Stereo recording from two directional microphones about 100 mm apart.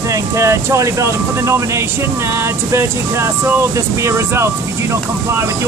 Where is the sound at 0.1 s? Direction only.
30° right (ahead or behind).